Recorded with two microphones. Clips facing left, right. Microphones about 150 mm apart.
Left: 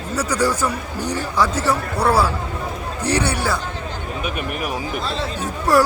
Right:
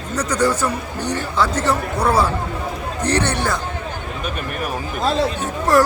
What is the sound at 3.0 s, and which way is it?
Speech, 10° left (ahead or behind).